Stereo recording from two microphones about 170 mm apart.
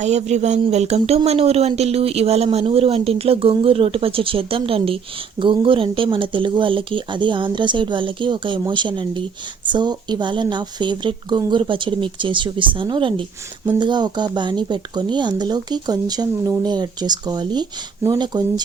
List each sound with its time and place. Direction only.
0.0 s speech: 40° right (ahead or behind); by 18.6 s 25° right (ahead or behind)